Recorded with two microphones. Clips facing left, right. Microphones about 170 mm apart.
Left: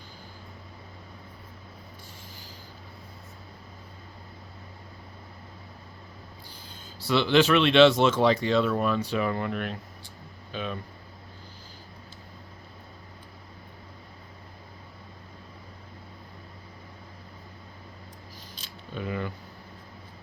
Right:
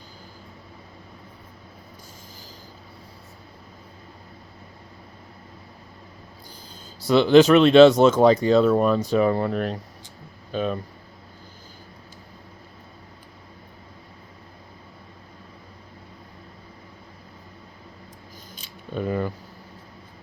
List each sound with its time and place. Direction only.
7.1 s speech: 40° right (ahead or behind)
18.9 s speech: 40° right (ahead or behind)